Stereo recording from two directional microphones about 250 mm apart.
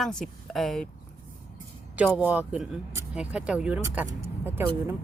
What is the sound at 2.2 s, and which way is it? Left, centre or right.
A woman's voice, centre.